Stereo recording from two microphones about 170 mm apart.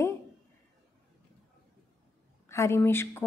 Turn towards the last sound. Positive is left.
turn(degrees=15)  # may be behind; listen again after turning